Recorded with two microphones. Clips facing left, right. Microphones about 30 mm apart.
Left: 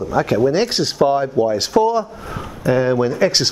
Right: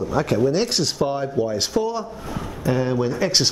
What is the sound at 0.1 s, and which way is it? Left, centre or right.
Speech, centre.